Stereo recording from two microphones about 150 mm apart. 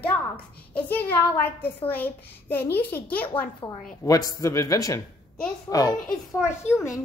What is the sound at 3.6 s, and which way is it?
Speech, 35° left (ahead or behind).